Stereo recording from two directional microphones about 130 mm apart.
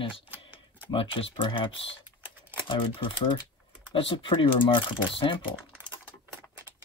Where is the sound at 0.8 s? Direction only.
45° left (ahead or behind).